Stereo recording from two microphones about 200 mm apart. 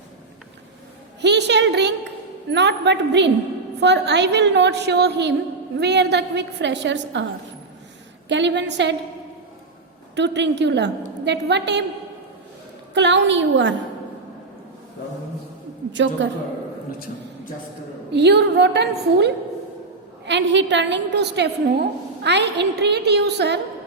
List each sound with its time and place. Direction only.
1.2 s a woman's voice: 60° right (ahead or behind)
8.3 s a woman's voice: 60° right (ahead or behind)
10.2 s a woman's voice: 60° right (ahead or behind)
12.9 s a woman's voice: 60° right (ahead or behind)
15.9 s a woman's voice: 65° right (ahead or behind)
18.1 s a woman's voice: 55° right (ahead or behind)